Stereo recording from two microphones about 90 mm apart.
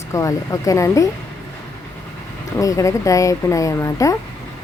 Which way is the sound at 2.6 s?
35° left (ahead or behind).